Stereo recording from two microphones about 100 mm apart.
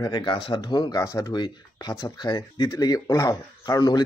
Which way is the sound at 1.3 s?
50° left (ahead or behind).